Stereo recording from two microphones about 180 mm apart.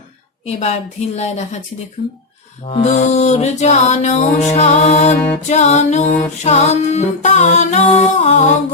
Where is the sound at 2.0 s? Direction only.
30° left (ahead or behind).